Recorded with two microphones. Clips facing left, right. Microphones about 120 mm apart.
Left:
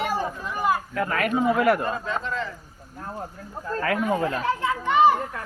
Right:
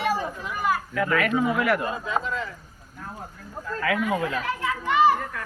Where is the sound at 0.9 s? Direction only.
40° left (ahead or behind).